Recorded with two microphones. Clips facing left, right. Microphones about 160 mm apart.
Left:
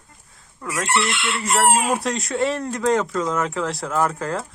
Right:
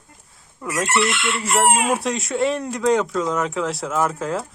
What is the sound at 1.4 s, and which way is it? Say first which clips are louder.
A woman's voice: even; 5° right (ahead or behind).